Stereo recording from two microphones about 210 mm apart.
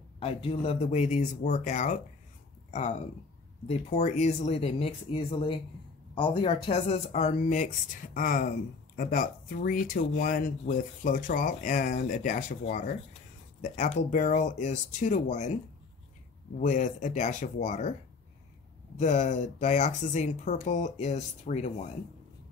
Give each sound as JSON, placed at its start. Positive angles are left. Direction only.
{"t": 0.2, "sound": "speech", "side_deg": 25}
{"t": 18.9, "sound": "speech", "side_deg": 35}